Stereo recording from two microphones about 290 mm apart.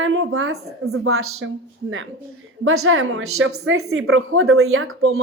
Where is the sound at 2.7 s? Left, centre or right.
Right.